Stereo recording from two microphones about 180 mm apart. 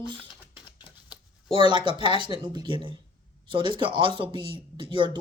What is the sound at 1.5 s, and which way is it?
Speech, 25° right (ahead or behind).